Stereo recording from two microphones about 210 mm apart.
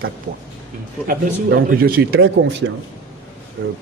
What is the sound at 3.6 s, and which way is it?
Speech, 50° right (ahead or behind).